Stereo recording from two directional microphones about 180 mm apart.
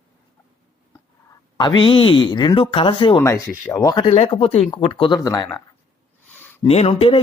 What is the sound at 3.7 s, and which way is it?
Speech, 20° left (ahead or behind).